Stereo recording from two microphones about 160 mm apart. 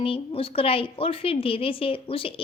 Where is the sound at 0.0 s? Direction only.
35° left (ahead or behind).